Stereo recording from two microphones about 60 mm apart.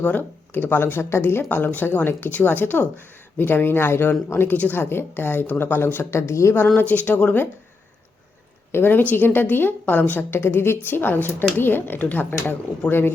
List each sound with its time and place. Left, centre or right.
0.0 s speech: left
1.5 s speech: left
4.5 s speech: left
4.8 s speech: left
6.7 s speech: left
8.7 s speech: left